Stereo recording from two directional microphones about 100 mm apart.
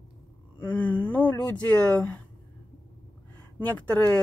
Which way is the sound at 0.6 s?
20° left (ahead or behind).